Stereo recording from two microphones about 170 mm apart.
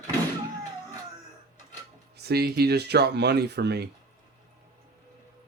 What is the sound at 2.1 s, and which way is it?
Speech, 70° right (ahead or behind).